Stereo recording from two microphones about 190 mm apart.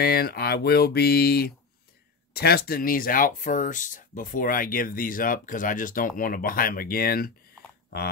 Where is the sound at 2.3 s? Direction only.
55° left (ahead or behind).